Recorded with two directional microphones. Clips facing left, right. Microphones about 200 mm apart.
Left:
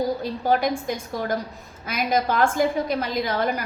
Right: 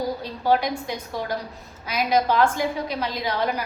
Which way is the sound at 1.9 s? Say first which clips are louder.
Right 1 dB; 50° left (ahead or behind).